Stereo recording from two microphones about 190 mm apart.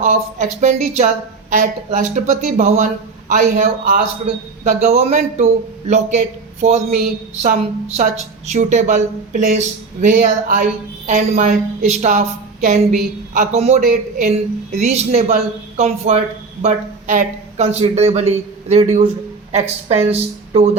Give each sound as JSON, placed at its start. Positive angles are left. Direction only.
{"t": 0.0, "sound": "a woman's voice", "side_deg": -40}
{"t": 4.6, "sound": "a woman's voice", "side_deg": -35}
{"t": 6.6, "sound": "a woman's voice", "side_deg": -35}